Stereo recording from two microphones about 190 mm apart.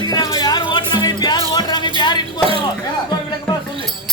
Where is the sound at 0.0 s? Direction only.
20° left (ahead or behind).